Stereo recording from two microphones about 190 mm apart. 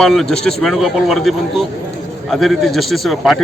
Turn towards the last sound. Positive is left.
turn(degrees=0)  # may be behind; listen again after turning